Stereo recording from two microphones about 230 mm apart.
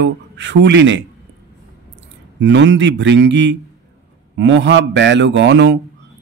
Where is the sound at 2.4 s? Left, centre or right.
Right.